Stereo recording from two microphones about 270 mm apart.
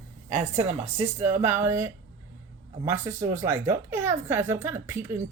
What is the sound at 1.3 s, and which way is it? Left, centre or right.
A woman's voice, centre.